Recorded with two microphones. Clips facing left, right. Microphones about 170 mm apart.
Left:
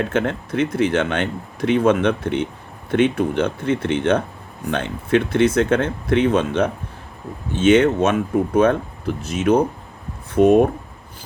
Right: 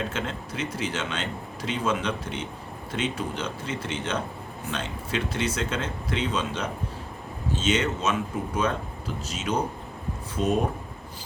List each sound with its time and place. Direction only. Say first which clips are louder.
0.0 s speech: left 10 dB; 60° left (ahead or behind)